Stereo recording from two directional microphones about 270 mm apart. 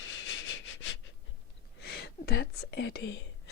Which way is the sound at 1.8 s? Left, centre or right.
Left.